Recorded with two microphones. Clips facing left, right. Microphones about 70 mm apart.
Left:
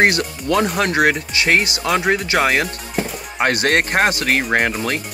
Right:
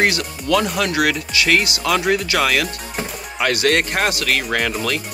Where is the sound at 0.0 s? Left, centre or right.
Left.